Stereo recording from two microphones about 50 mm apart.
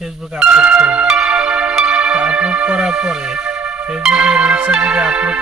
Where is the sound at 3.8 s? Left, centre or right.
Right.